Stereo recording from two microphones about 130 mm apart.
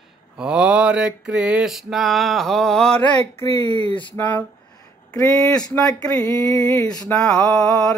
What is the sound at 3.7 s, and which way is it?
Speech, 40° left (ahead or behind).